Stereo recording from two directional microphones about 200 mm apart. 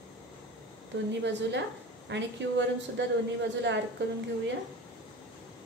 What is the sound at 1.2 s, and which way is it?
A woman's voice, 60° right (ahead or behind).